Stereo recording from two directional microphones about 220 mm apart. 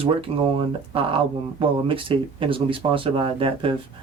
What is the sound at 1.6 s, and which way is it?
Speech, 25° right (ahead or behind).